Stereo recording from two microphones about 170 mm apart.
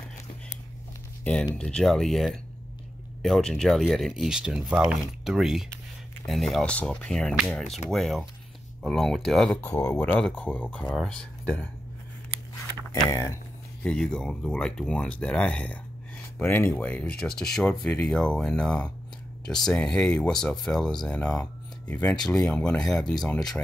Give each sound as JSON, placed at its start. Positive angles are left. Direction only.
{"t": 1.6, "sound": "speech", "side_deg": 5}
{"t": 12.9, "sound": "speech", "side_deg": 20}
{"t": 13.8, "sound": "speech", "side_deg": 5}